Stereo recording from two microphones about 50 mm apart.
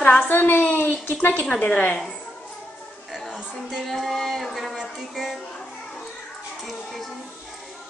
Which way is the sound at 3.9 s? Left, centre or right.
Centre.